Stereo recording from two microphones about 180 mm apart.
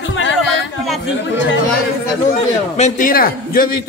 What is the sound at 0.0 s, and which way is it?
Music, 90° left.